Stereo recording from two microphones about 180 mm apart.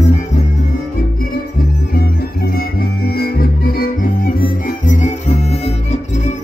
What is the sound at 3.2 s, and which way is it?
Music, 55° left (ahead or behind).